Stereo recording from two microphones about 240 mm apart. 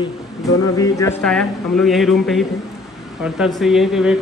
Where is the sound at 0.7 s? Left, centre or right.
Centre.